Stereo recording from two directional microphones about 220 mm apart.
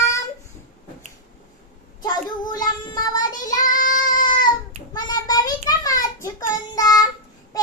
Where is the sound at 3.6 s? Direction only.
35° left (ahead or behind).